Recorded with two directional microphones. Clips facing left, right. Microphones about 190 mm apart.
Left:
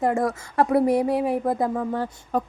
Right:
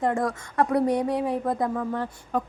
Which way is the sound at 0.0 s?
25° left (ahead or behind).